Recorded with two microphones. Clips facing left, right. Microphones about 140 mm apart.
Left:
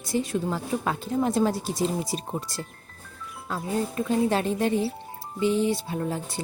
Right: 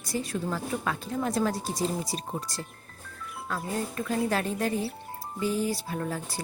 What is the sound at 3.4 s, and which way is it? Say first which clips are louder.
A woman's voice: left 4 dB; 25° left (ahead or behind).